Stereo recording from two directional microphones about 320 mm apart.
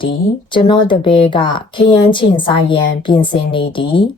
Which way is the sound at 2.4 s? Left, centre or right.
Centre.